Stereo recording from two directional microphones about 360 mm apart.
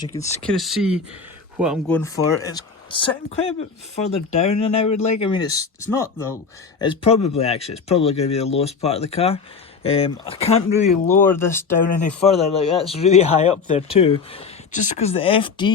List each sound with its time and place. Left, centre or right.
0.0 s speech: centre
0.4 s speech: centre
11.1 s speech: centre